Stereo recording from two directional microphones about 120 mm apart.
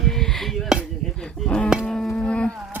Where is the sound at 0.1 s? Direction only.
5° left (ahead or behind).